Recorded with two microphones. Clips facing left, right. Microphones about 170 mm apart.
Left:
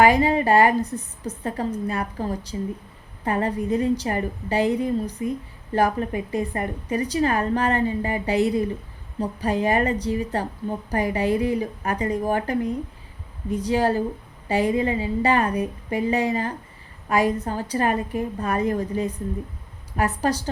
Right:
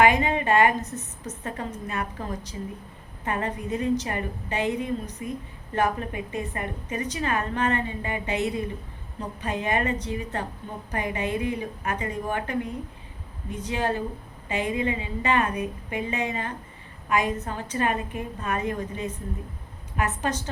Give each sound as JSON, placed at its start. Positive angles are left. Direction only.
{"t": 0.0, "sound": "a woman's voice", "side_deg": 35}